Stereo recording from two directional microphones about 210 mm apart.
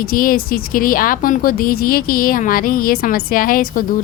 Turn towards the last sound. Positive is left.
turn(degrees=40)  # may be behind; listen again after turning